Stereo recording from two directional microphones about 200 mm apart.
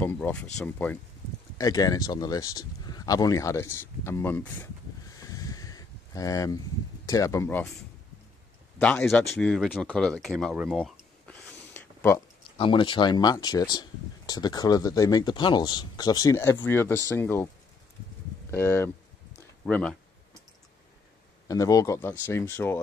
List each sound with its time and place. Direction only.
0.0 s speech: 10° left (ahead or behind)
1.6 s speech: 20° left (ahead or behind)
5.3 s a sound: 15° left (ahead or behind)
7.1 s speech: 15° left (ahead or behind)
12.5 s speech: 25° left (ahead or behind)
18.5 s speech: 15° left (ahead or behind)
21.5 s speech: 15° left (ahead or behind)